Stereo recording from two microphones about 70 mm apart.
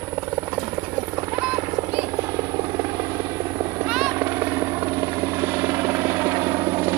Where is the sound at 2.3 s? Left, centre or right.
Right.